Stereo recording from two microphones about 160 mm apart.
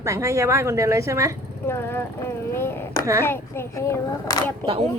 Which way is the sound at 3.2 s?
15° left (ahead or behind).